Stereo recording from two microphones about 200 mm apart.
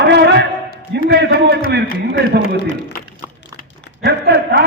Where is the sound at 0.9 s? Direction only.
60° right (ahead or behind).